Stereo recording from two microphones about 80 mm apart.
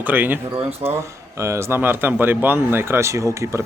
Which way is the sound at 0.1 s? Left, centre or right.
Right.